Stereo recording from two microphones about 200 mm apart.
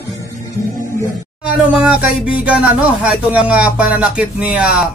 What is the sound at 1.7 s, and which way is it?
Speech, 5° right (ahead or behind).